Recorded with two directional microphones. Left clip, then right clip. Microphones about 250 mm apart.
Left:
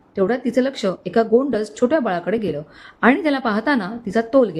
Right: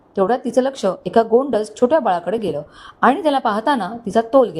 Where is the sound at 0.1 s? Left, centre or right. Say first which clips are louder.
Right 3 dB; centre.